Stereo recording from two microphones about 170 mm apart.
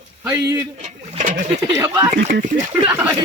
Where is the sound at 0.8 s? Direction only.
45° right (ahead or behind).